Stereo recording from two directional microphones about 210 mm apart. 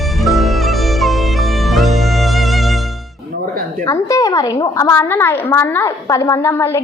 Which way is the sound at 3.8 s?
15° left (ahead or behind).